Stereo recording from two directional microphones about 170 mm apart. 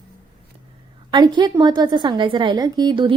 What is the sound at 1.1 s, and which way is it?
A woman's voice, 25° right (ahead or behind).